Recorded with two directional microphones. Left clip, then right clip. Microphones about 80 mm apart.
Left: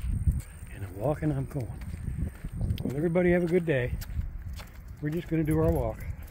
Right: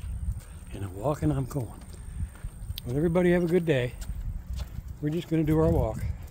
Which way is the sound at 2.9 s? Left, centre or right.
Right.